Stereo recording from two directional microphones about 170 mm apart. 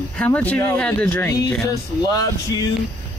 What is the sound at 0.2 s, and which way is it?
Speech, 10° left (ahead or behind).